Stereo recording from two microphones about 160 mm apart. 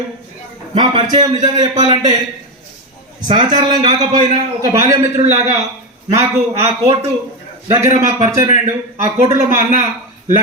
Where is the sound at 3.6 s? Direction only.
25° right (ahead or behind).